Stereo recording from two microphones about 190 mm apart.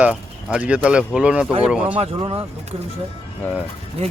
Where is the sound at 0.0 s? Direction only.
5° right (ahead or behind).